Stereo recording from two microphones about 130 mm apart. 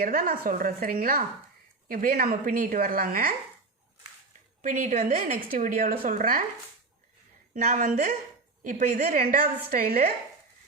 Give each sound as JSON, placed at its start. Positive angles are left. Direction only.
{"t": 0.0, "sound": "a woman's voice", "side_deg": -90}
{"t": 4.6, "sound": "a woman's voice", "side_deg": -80}
{"t": 7.5, "sound": "a woman's voice", "side_deg": -80}